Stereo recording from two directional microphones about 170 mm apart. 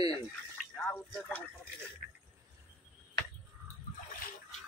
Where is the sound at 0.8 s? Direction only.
10° left (ahead or behind).